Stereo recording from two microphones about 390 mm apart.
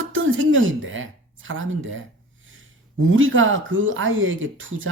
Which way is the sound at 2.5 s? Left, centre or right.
Right.